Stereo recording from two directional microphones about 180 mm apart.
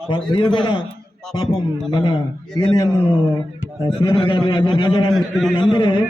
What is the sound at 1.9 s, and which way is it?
Speech, 25° left (ahead or behind).